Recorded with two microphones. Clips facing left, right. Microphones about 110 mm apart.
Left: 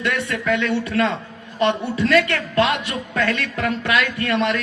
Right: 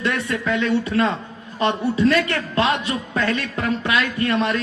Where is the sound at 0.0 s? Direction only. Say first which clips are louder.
Even; 30° right (ahead or behind).